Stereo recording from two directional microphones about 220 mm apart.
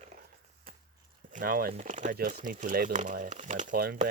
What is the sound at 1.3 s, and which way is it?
Speech, 40° right (ahead or behind).